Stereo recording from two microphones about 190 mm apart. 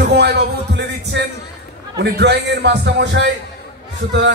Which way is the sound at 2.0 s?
65° right (ahead or behind).